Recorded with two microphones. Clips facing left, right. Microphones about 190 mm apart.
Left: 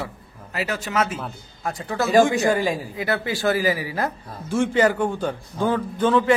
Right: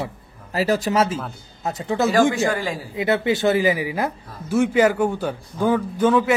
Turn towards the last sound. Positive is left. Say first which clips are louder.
# right 2 dB
turn(degrees=-10)  # may be behind; listen again after turning